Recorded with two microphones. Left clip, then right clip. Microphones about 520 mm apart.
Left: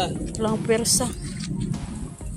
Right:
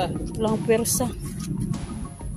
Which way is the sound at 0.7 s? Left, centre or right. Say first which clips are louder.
Left 1 dB; right.